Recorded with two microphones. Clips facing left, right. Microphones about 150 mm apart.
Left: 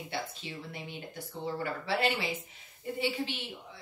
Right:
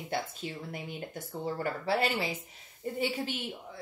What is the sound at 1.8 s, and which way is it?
Speech, 40° right (ahead or behind).